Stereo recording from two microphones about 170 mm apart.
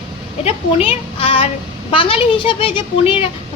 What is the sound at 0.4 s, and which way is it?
A woman's voice, 35° left (ahead or behind).